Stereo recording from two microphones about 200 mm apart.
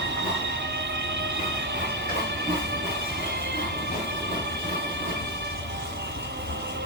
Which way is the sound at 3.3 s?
55° right (ahead or behind).